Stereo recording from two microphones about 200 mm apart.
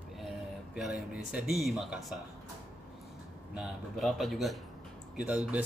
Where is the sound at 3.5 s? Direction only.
Centre (ahead or behind).